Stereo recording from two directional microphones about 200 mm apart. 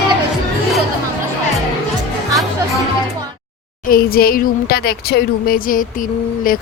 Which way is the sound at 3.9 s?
50° left (ahead or behind).